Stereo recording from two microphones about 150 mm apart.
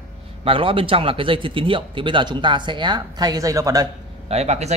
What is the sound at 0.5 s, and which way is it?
Speech, 35° right (ahead or behind).